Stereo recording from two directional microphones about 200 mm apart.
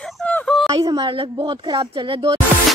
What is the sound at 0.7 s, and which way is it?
Speech, 20° right (ahead or behind).